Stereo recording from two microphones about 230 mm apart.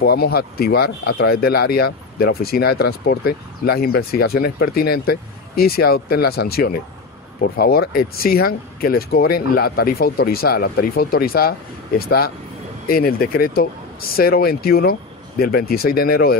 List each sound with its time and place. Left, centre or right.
0.0 s speech: left